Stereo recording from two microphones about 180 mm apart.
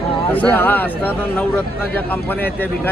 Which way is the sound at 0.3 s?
10° left (ahead or behind).